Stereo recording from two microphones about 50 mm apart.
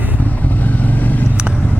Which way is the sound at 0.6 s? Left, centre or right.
Left.